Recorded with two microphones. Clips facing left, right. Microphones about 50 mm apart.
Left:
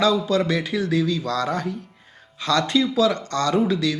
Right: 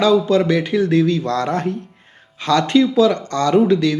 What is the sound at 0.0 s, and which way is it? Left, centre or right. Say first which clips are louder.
Speech: right 5 dB; right.